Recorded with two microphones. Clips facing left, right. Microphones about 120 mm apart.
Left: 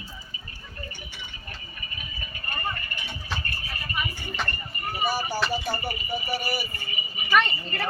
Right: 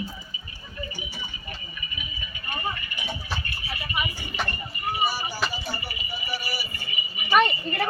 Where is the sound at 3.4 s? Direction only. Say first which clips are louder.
Right 1 dB; 40° left (ahead or behind).